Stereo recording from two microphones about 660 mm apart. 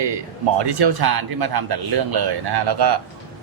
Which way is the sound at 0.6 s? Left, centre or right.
Right.